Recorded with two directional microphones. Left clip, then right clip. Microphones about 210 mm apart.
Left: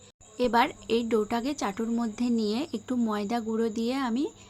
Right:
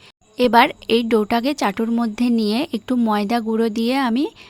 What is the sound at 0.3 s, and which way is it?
A woman's voice, 45° right (ahead or behind).